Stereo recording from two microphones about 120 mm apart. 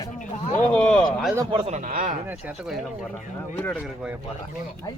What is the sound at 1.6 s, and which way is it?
Speech, 85° right.